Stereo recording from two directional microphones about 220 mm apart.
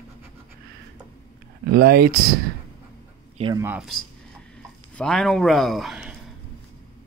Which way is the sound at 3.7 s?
5° right (ahead or behind).